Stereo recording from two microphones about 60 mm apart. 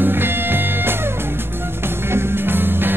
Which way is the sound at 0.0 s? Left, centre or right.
Right.